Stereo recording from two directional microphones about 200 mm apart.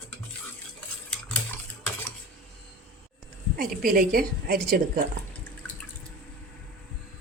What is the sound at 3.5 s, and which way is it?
A woman's voice, 45° right (ahead or behind).